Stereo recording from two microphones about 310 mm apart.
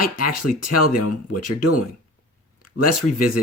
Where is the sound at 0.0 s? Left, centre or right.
Left.